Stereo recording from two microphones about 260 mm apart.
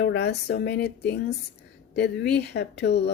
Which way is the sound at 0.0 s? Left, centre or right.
Left.